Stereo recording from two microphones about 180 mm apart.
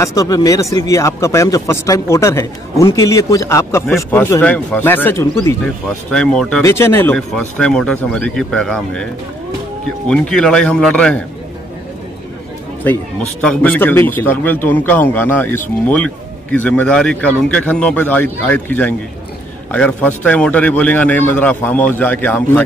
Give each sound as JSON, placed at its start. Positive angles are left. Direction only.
{"t": 0.0, "sound": "a man's voice", "side_deg": 20}
{"t": 5.9, "sound": "a man's voice", "side_deg": 5}
{"t": 10.0, "sound": "speech", "side_deg": 5}
{"t": 13.4, "sound": "a man's voice", "side_deg": 5}